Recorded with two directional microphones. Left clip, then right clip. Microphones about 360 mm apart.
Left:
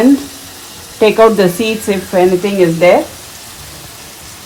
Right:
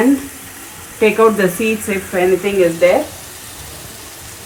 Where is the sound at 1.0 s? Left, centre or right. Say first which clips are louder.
Left 4 dB; left.